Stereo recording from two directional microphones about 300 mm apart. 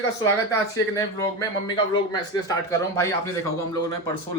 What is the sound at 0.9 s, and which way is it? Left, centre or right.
A man's voice, centre.